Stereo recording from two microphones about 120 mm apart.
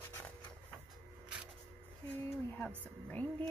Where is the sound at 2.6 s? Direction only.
15° left (ahead or behind).